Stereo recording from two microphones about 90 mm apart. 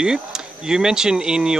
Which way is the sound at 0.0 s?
5° right (ahead or behind).